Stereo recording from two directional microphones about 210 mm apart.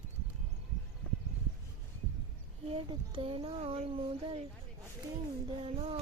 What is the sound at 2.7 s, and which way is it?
Speech, 25° right (ahead or behind).